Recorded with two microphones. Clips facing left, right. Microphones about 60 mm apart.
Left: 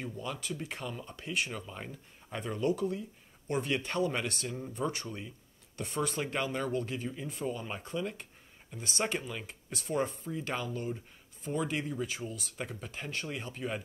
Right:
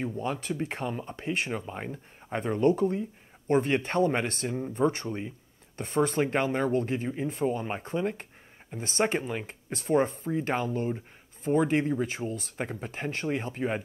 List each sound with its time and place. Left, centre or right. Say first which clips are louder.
0.0 s speech: right 7 dB; right